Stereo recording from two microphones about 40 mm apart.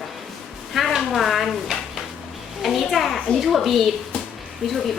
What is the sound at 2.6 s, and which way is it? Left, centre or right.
Speech, centre.